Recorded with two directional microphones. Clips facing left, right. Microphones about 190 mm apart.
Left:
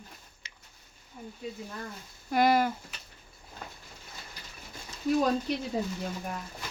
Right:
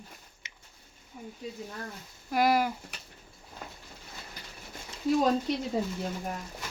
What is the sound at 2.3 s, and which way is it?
Speech, 5° right (ahead or behind).